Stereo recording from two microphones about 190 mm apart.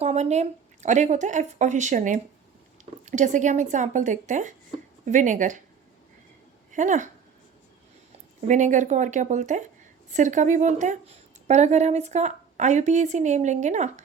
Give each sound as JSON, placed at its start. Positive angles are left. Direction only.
{"t": 0.0, "sound": "a woman's voice", "side_deg": -35}
{"t": 6.7, "sound": "speech", "side_deg": -40}
{"t": 8.4, "sound": "a woman's voice", "side_deg": -40}